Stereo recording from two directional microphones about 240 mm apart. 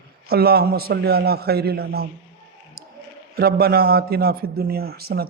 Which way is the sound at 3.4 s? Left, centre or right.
Right.